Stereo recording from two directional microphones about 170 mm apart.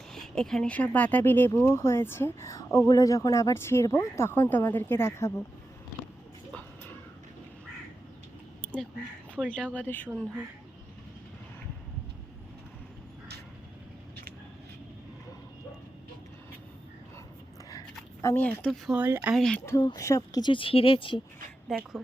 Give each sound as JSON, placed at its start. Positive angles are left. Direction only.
{"t": 0.1, "sound": "speech", "side_deg": 5}
{"t": 9.7, "sound": "speech", "side_deg": 10}
{"t": 17.7, "sound": "speech", "side_deg": 20}
{"t": 19.4, "sound": "speech", "side_deg": 5}
{"t": 19.6, "sound": "speech", "side_deg": 20}
{"t": 21.7, "sound": "speech", "side_deg": 0}